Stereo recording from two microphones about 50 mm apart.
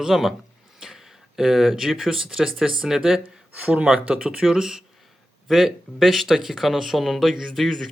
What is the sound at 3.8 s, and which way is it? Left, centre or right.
Speech, right.